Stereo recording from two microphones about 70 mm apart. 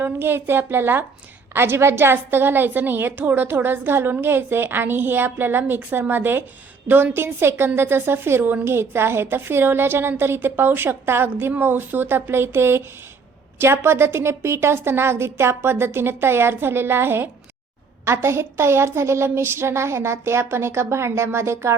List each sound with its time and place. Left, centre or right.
0.0 s a woman's voice: right